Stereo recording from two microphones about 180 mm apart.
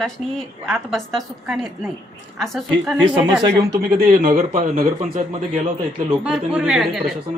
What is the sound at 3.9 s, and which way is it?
A man's voice, 55° right (ahead or behind).